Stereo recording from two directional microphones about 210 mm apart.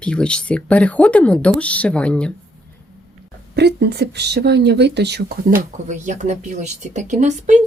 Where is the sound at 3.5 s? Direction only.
50° right (ahead or behind).